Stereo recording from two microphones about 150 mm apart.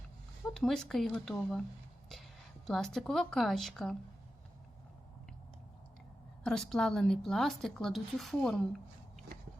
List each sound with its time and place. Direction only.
0.5 s speech: 5° left (ahead or behind)
2.6 s speech: centre (ahead or behind)
6.4 s speech: 5° left (ahead or behind)